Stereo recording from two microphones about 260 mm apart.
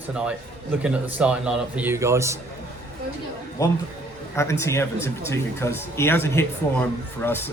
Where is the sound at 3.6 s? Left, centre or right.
Centre.